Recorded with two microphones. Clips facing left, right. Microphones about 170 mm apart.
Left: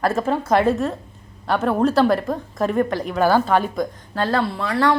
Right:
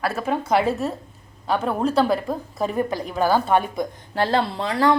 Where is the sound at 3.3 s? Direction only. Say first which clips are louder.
Left 1 dB; 15° right (ahead or behind).